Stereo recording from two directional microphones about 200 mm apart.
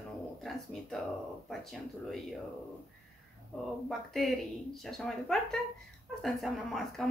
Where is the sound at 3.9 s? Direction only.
Centre (ahead or behind).